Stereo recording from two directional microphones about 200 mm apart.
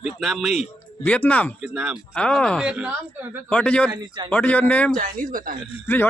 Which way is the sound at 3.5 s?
5° left (ahead or behind).